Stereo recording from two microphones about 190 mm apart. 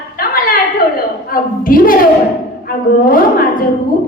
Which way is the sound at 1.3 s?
50° left (ahead or behind).